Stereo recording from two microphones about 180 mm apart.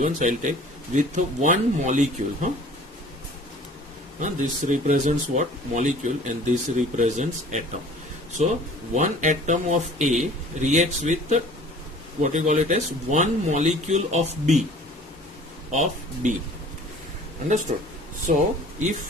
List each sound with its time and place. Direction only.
0.0 s speech: 45° right (ahead or behind)
4.2 s speech: 45° right (ahead or behind)
15.7 s speech: 40° right (ahead or behind)
17.7 s speech: 45° right (ahead or behind)